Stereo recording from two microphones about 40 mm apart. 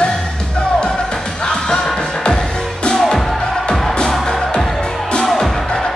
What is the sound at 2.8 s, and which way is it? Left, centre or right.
Music, centre.